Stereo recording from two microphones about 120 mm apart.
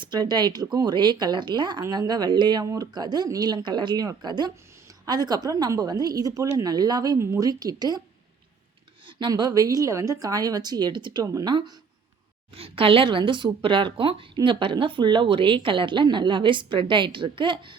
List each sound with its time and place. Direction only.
0.0 s a woman's voice: 35° right (ahead or behind)
9.0 s a woman's voice: 40° right (ahead or behind)
12.5 s speech: 50° right (ahead or behind)